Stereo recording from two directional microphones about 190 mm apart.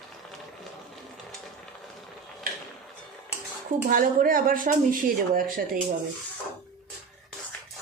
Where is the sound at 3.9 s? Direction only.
50° right (ahead or behind).